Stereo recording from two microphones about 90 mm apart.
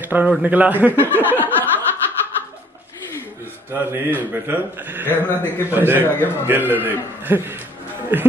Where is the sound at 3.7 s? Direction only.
25° right (ahead or behind).